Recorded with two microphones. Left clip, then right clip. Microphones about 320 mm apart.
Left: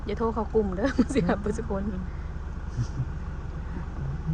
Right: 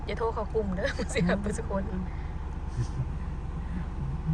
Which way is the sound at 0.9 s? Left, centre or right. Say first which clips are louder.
Left 5 dB; left.